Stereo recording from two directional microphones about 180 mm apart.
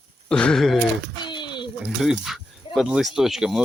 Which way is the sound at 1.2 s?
25° left (ahead or behind).